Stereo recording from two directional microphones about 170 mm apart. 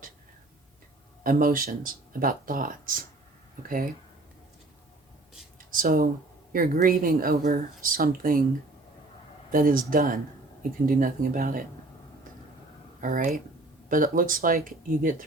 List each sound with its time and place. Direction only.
1.2 s speech: 55° right (ahead or behind)
5.5 s a sound: 55° right (ahead or behind)
6.5 s speech: 55° right (ahead or behind)
9.5 s speech: 55° right (ahead or behind)
13.0 s speech: 50° right (ahead or behind)